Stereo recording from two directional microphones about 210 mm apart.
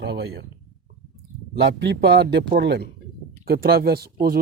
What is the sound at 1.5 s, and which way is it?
Speech, 50° right (ahead or behind).